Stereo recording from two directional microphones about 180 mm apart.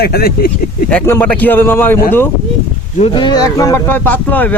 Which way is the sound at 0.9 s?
10° left (ahead or behind).